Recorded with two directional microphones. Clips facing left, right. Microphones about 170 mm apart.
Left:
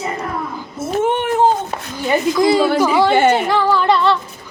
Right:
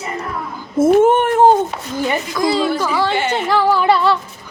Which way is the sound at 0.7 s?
50° right (ahead or behind).